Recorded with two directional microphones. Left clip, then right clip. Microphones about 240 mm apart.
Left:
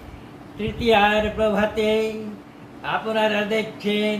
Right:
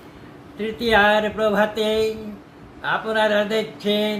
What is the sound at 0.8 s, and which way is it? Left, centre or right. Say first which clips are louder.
Speech: right 1 dB; right.